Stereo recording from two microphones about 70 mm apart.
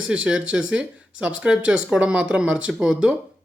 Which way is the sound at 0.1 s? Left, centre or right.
Centre.